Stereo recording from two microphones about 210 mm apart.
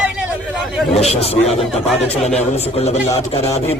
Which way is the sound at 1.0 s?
30° left (ahead or behind).